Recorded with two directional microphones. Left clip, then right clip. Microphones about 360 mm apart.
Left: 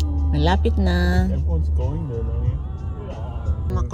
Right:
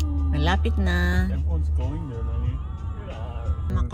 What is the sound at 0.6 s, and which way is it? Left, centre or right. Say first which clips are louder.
Speech: left 4 dB; left.